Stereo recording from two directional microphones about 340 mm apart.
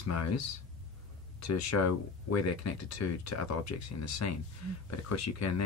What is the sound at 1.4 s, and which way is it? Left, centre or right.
Speech, left.